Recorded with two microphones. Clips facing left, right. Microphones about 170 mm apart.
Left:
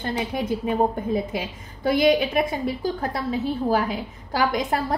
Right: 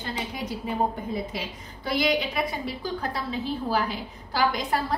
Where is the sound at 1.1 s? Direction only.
50° left (ahead or behind).